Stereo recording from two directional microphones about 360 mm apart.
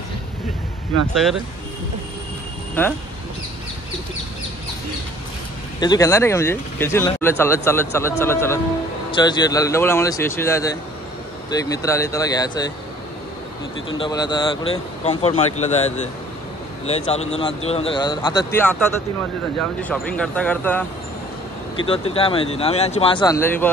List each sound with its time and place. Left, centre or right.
1.1 s speech: centre
5.8 s speech: centre
13.9 s speech: centre
19.8 s speech: centre
21.8 s speech: centre